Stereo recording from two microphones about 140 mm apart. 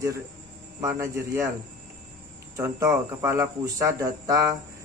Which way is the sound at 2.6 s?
20° right (ahead or behind).